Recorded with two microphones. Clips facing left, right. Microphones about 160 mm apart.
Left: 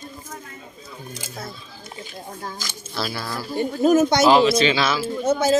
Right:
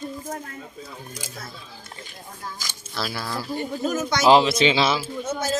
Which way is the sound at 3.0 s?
5° right (ahead or behind).